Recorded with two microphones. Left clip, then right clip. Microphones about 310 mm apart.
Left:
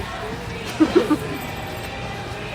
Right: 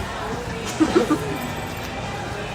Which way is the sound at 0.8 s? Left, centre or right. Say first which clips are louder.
Left 2 dB; centre.